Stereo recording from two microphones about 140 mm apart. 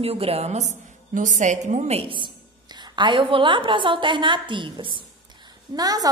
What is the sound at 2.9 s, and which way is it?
A woman's voice, 35° right (ahead or behind).